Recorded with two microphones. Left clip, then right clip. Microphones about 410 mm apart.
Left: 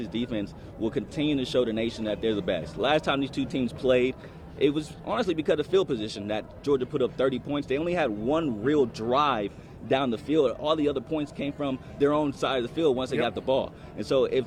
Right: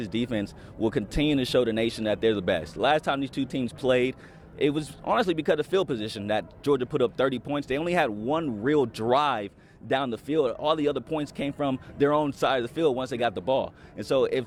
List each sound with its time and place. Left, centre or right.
0.0 s speech: right